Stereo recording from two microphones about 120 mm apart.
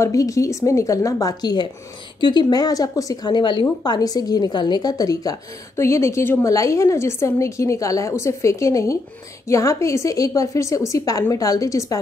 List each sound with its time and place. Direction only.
0.0 s a woman's voice: 25° left (ahead or behind)